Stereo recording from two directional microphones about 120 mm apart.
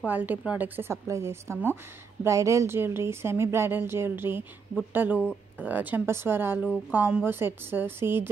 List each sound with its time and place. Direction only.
0.0 s a woman's voice: 15° right (ahead or behind)